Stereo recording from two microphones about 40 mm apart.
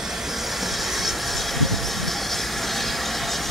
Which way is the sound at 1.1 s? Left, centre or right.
Centre.